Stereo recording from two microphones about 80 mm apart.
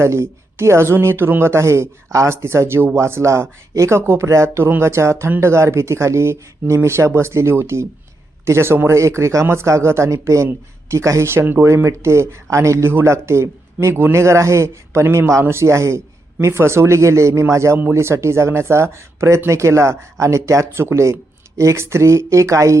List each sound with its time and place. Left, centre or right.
0.0 s speech: right